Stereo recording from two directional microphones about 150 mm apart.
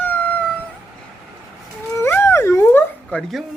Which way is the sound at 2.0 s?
15° left (ahead or behind).